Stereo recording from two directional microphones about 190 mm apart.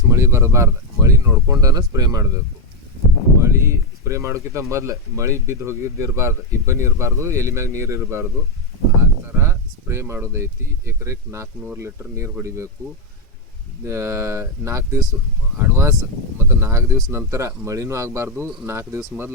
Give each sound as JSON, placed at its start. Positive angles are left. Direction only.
{"t": 0.1, "sound": "speech", "side_deg": -15}
{"t": 3.4, "sound": "speech", "side_deg": -15}
{"t": 13.8, "sound": "speech", "side_deg": -15}